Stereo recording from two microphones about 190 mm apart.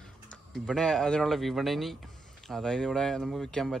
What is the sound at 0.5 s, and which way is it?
Speech, 5° left (ahead or behind).